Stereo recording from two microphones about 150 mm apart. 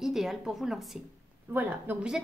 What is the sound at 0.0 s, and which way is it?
Speech, 5° right (ahead or behind).